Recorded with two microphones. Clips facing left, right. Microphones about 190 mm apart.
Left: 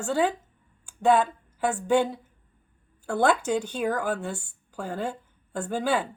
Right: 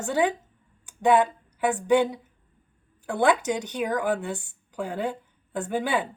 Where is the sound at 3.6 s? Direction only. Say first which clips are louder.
Right 1 dB; 20° right (ahead or behind).